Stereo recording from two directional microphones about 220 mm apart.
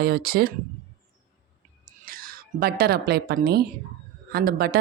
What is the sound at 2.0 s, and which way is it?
A woman's voice, 40° right (ahead or behind).